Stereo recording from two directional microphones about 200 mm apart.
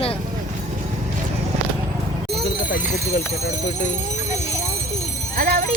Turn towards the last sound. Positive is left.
turn(degrees=-50)  # may be behind; listen again after turning